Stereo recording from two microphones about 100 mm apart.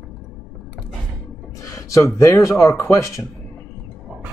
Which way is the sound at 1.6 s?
30° left (ahead or behind).